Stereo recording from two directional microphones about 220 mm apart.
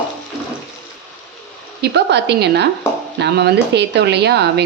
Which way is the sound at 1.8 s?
50° right (ahead or behind).